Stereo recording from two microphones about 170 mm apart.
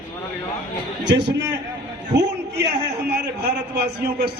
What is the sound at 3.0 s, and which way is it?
Speech, 75° right (ahead or behind).